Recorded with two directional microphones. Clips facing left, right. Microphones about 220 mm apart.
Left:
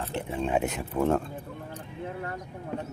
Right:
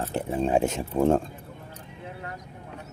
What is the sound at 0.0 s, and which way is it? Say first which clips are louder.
Speech: right 4 dB; 40° right (ahead or behind).